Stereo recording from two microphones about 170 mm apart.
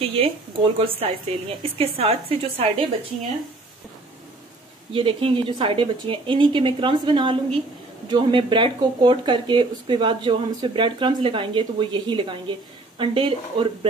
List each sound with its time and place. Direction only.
0.0 s a woman's voice: 35° right (ahead or behind)
4.9 s speech: 30° right (ahead or behind)